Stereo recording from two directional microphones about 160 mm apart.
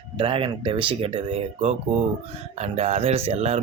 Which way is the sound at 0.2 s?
35° right (ahead or behind).